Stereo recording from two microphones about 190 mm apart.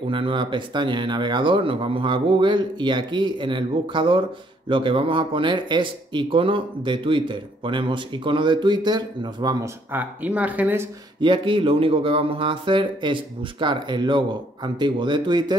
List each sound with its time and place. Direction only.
0.1 s speech: 25° right (ahead or behind); by 10.9 s 10° right (ahead or behind)
11.1 s speech: 25° right (ahead or behind)